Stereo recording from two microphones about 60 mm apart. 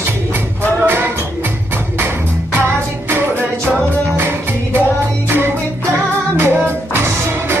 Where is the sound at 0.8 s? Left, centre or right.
Right.